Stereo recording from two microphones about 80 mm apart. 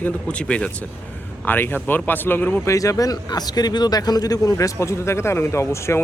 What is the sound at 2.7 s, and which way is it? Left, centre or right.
A man's voice, left.